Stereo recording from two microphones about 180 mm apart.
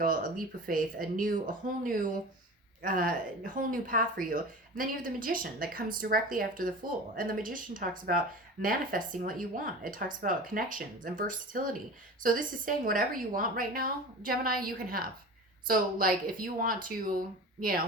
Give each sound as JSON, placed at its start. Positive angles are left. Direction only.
{"t": 0.0, "sound": "a woman's voice", "side_deg": -50}